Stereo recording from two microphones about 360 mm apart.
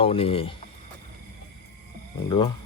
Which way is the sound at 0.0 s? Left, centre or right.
Centre.